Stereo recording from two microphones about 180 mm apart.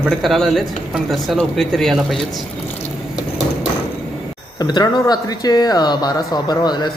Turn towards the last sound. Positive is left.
turn(degrees=25)  # may be behind; listen again after turning